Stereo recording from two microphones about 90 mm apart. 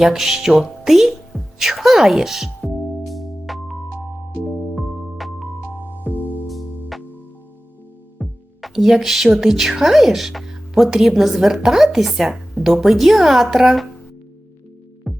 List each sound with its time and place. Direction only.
0.0 s music: 5° right (ahead or behind)
6.0 s music: 20° left (ahead or behind)
6.5 s music: centre (ahead or behind)
8.2 s a woman's voice: centre (ahead or behind)
15.1 s music: centre (ahead or behind)